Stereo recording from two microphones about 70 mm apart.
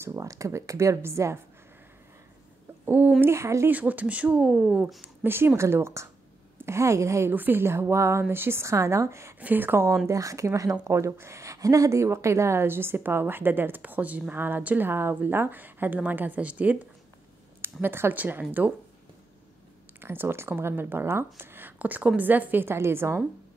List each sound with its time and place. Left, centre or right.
0.0 s a woman's voice: right
2.8 s speech: right
3.2 s a woman's voice: right
3.6 s a woman's voice: right
5.0 s a woman's voice: right
7.3 s speech: right
9.4 s a woman's voice: right
10.0 s a woman's voice: right; by 16.7 s centre
17.8 s a woman's voice: right
20.0 s speech: right